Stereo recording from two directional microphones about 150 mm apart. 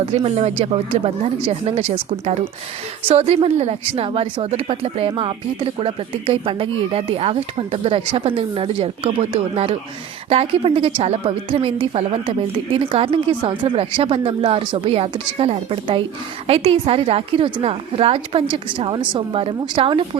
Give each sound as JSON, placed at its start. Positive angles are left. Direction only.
{"t": 0.0, "sound": "a woman's voice", "side_deg": -40}